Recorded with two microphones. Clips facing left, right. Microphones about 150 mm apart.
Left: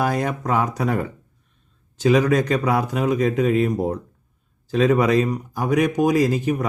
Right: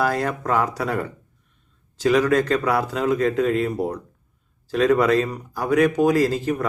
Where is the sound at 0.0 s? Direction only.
15° left (ahead or behind).